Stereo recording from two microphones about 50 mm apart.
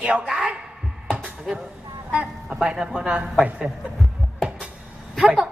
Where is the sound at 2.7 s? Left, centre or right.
Centre.